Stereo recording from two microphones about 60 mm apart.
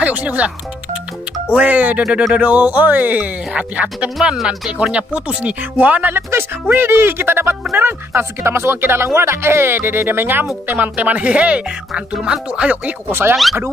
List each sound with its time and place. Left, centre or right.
0.0 s speech: right
1.5 s speech: right
4.2 s speech: centre; by 6.2 s right
6.7 s speech: right; by 12.9 s centre
13.1 s speech: right